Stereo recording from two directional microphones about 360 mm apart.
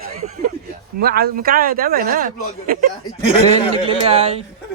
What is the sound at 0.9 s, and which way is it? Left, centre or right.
Speech, right.